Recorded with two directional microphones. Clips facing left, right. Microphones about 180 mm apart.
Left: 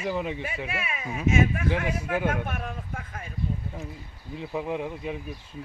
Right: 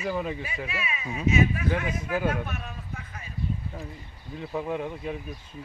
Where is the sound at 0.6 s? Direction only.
50° left (ahead or behind).